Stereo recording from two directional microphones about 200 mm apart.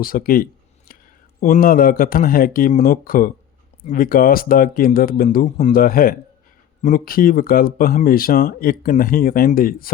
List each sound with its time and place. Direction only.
0.0 s speech: 45° left (ahead or behind)
0.9 s a sound: 45° left (ahead or behind)
1.4 s speech: 40° left (ahead or behind)